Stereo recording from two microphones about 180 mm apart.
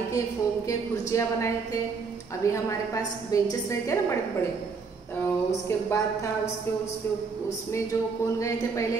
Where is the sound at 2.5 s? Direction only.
20° left (ahead or behind).